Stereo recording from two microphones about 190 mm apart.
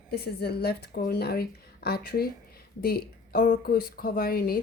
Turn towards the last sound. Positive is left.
turn(degrees=50)  # may be behind; listen again after turning